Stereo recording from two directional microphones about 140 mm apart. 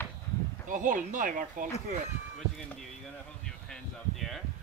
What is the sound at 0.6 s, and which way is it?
Speech, 70° right (ahead or behind).